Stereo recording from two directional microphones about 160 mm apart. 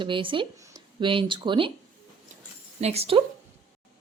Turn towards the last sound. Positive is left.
turn(degrees=-35)  # may be behind; listen again after turning